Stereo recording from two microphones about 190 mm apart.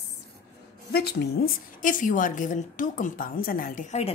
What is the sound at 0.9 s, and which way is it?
A woman's voice, 60° left (ahead or behind).